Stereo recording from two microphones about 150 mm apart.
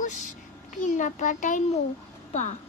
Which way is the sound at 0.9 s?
55° left (ahead or behind).